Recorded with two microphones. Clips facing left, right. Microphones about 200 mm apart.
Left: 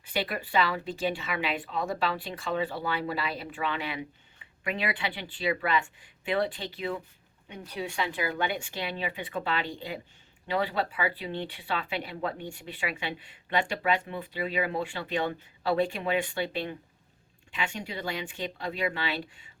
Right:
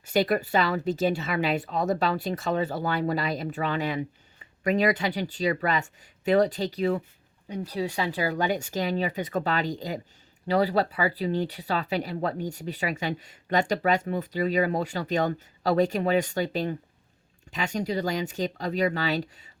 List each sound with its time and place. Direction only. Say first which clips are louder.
0.0 s speech: right 8 dB; 40° right (ahead or behind)